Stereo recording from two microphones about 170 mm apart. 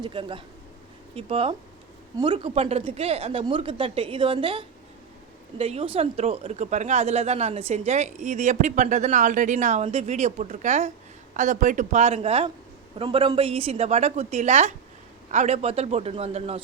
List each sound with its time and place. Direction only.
0.0 s a man's voice: 30° right (ahead or behind)